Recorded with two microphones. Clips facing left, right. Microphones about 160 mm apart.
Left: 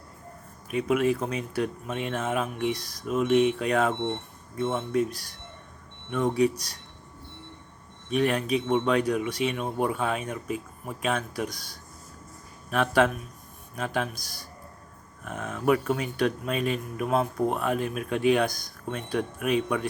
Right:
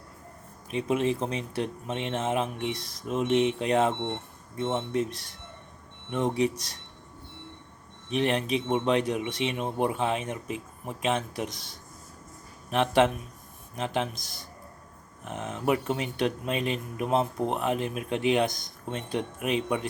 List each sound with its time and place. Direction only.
0.7 s speech: 25° right (ahead or behind)
8.1 s speech: 25° right (ahead or behind)